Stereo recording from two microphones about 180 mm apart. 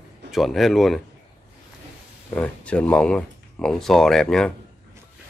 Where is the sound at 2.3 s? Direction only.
5° left (ahead or behind).